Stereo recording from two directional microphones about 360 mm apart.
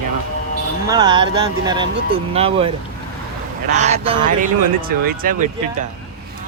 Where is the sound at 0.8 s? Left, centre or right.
Centre.